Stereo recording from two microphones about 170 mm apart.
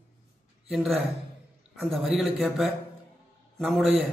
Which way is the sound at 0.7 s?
Centre (ahead or behind).